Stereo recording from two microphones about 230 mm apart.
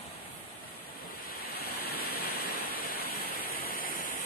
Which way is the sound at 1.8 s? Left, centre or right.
Left.